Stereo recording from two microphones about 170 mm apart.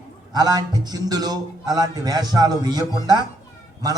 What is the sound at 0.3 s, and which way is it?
A man's voice, 25° right (ahead or behind).